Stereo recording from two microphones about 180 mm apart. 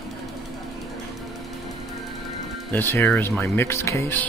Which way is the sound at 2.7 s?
15° left (ahead or behind).